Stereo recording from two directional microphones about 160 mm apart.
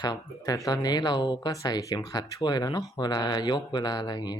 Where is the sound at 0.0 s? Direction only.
25° left (ahead or behind).